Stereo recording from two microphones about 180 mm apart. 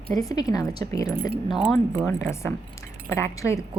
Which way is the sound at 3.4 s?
15° left (ahead or behind).